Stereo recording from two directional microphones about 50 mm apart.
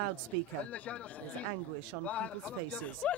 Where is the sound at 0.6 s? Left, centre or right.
Left.